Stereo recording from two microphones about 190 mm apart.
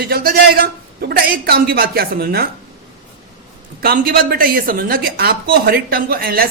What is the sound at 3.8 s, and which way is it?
A woman's voice, 55° right (ahead or behind).